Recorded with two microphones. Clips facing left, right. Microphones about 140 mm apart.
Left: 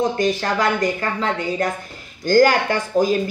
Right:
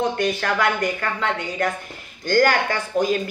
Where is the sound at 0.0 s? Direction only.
35° left (ahead or behind).